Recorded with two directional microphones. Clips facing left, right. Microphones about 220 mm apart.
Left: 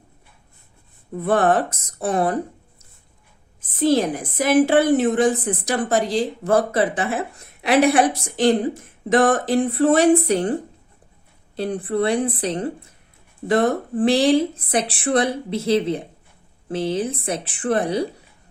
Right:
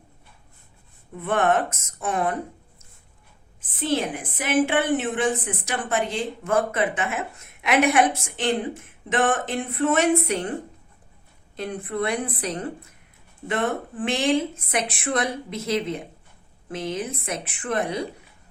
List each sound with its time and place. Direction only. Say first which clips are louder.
1.1 s a woman's voice: left 4 dB; 35° left (ahead or behind)
3.6 s a woman's voice: left 7 dB; 40° left (ahead or behind)